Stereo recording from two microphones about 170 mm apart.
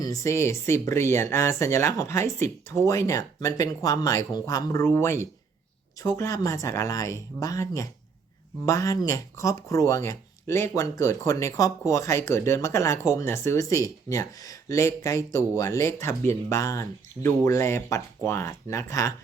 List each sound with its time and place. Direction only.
0.0 s speech: 20° left (ahead or behind)